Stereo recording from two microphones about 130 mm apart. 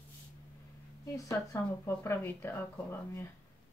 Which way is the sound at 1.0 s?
25° left (ahead or behind).